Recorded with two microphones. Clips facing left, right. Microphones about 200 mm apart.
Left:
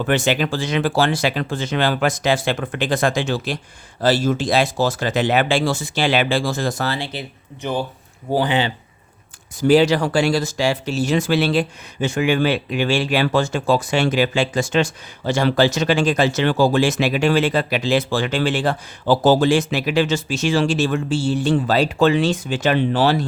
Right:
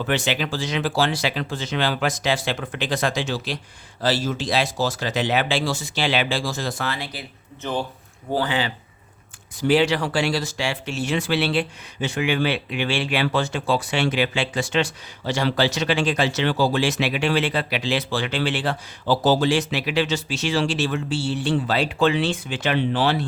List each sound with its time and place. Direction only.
0.0 s speech: 50° left (ahead or behind); by 8.7 s 20° left (ahead or behind)
9.6 s speech: 40° left (ahead or behind)